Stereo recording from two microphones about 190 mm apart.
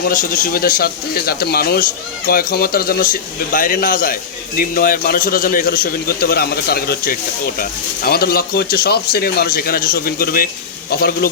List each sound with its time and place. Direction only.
0.1 s speech: 45° left (ahead or behind)